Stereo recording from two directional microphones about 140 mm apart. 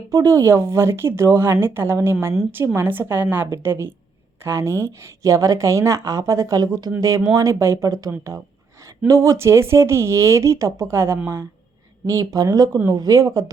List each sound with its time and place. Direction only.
0.1 s a woman's voice: 25° right (ahead or behind)